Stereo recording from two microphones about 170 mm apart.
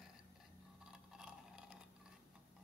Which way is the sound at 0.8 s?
5° right (ahead or behind).